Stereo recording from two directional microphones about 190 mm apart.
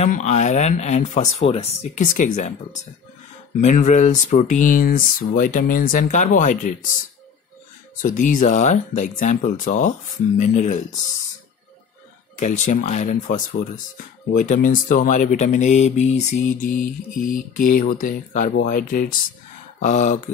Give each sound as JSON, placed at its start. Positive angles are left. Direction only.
{"t": 0.0, "sound": "speech", "side_deg": 35}
{"t": 8.0, "sound": "speech", "side_deg": 45}
{"t": 12.4, "sound": "speech", "side_deg": 40}